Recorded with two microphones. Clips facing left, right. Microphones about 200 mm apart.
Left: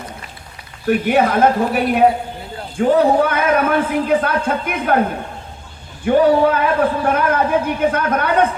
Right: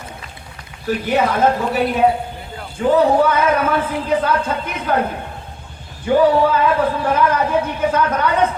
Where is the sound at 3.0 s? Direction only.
55° left (ahead or behind).